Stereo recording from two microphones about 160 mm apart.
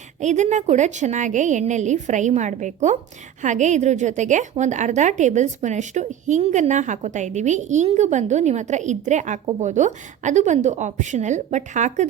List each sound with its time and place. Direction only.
0.2 s a woman's voice: 50° right (ahead or behind)